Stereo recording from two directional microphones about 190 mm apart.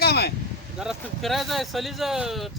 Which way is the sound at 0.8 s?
Centre (ahead or behind).